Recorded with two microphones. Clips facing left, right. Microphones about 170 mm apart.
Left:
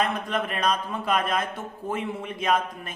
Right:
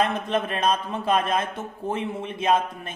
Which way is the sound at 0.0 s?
25° right (ahead or behind).